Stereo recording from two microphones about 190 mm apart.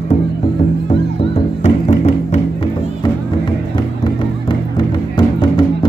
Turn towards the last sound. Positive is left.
turn(degrees=25)  # may be behind; listen again after turning